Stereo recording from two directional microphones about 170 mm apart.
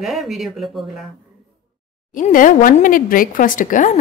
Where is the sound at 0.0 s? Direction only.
Centre (ahead or behind).